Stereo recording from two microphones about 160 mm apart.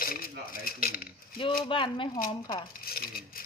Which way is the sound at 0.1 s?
65° left (ahead or behind).